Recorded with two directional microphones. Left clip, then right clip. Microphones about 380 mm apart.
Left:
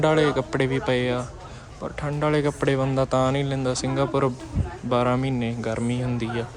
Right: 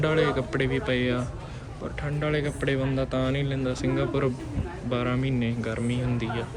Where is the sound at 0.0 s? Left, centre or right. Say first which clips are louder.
Left 4 dB; centre.